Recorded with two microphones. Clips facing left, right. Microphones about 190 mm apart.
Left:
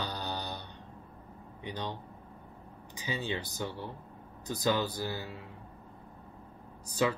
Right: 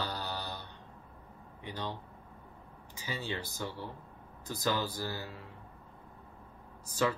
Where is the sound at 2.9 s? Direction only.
20° left (ahead or behind).